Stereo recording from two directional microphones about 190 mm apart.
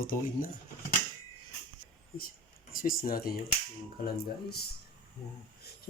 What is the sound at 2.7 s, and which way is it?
Speech, 50° left (ahead or behind).